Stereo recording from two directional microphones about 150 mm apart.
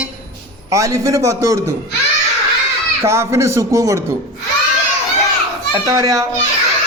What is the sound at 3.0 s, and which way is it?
Speech, 20° right (ahead or behind).